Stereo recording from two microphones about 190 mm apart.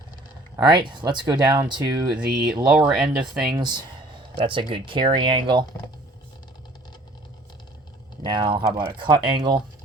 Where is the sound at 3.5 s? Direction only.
25° right (ahead or behind).